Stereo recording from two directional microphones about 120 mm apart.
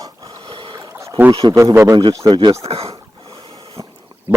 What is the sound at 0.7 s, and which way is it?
Boat, 25° right (ahead or behind).